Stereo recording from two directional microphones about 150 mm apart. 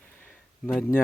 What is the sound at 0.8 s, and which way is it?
Speech, 15° left (ahead or behind).